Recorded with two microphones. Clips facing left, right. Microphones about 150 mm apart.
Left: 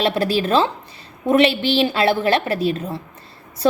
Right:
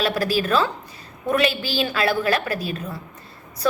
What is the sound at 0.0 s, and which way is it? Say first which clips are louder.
A woman's voice: left 3 dB; 25° left (ahead or behind).